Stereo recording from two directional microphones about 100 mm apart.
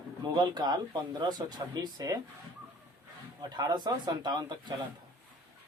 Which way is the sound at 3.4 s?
40° right (ahead or behind).